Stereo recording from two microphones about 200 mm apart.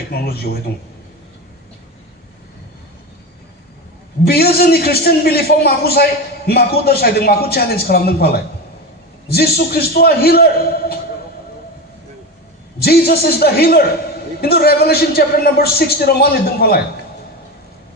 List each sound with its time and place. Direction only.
0.1 s a man's voice: 50° left (ahead or behind)
4.2 s a man's voice: 50° left (ahead or behind)
9.3 s a man's voice: 50° left (ahead or behind)
12.8 s a man's voice: 50° left (ahead or behind)